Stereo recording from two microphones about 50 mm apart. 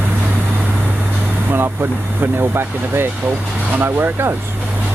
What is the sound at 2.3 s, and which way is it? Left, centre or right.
Speech, right.